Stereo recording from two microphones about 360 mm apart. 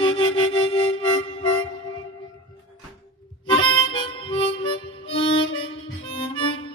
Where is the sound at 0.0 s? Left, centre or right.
Centre.